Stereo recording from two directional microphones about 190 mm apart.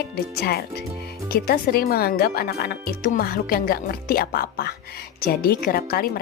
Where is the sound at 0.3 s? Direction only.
55° left (ahead or behind).